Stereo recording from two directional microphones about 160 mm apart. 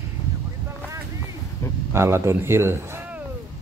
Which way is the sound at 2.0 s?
15° right (ahead or behind).